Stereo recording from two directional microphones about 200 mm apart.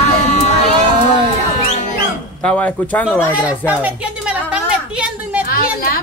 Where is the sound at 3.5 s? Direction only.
5° right (ahead or behind).